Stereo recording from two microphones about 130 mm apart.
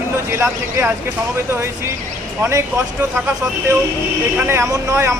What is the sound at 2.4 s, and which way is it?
Speech, 20° right (ahead or behind).